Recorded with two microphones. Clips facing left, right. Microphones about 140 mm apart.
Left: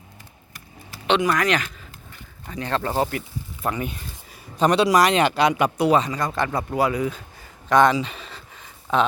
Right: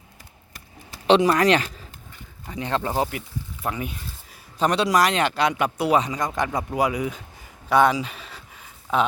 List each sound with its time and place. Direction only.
1.0 s speech: 35° right (ahead or behind)
2.5 s speech: 20° right (ahead or behind)
6.0 s speech: 15° right (ahead or behind)
7.7 s a sound: 10° right (ahead or behind)